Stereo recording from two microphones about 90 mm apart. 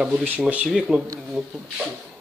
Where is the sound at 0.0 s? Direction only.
20° right (ahead or behind).